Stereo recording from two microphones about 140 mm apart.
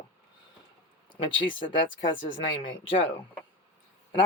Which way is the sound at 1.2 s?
35° left (ahead or behind).